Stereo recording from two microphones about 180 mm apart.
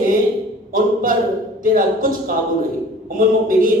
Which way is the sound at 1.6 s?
50° right (ahead or behind).